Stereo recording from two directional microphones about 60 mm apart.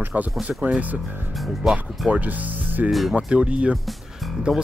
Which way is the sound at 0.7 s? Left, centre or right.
Right.